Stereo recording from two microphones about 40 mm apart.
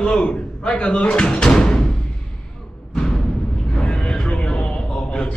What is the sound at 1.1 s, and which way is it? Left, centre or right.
Speech, left.